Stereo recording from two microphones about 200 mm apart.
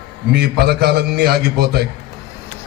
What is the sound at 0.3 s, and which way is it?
A man's voice, 55° right (ahead or behind).